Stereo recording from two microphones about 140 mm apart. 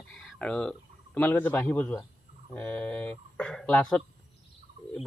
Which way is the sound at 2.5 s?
10° left (ahead or behind).